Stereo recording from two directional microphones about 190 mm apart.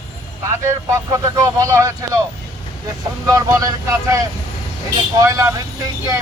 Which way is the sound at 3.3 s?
20° right (ahead or behind).